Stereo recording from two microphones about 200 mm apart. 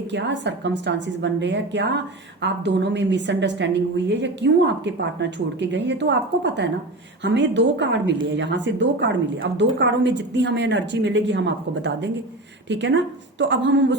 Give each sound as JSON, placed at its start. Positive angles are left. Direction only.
{"t": 0.1, "sound": "a woman's voice", "side_deg": -60}